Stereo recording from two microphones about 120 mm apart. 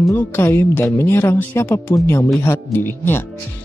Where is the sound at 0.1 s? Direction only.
20° left (ahead or behind).